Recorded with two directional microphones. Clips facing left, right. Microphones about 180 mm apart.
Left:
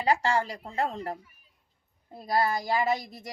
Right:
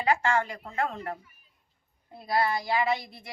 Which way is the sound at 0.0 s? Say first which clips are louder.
Even; 35° left (ahead or behind).